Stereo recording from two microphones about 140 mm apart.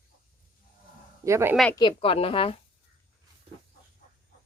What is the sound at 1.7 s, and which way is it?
Speech, 30° left (ahead or behind).